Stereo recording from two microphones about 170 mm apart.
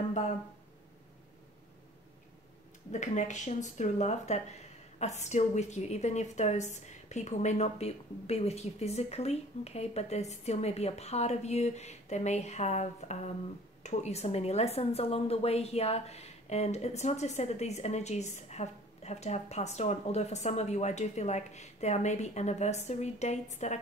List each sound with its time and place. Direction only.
2.9 s speech: 45° left (ahead or behind)